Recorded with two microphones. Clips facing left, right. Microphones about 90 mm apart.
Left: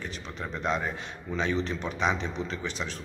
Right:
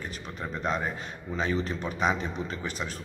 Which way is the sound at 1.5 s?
40° right (ahead or behind).